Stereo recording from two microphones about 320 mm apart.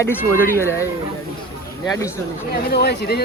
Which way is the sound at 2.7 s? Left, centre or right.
Left.